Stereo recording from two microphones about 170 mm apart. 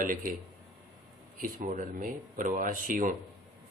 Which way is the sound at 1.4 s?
50° right (ahead or behind).